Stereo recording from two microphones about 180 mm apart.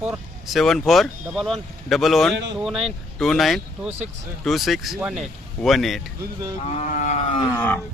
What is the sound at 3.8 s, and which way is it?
Speech, 35° right (ahead or behind).